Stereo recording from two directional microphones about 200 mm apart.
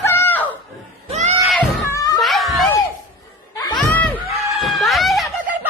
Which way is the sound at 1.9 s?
20° left (ahead or behind).